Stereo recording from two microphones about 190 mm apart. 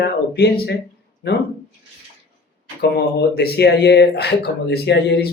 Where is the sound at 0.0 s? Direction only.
55° left (ahead or behind).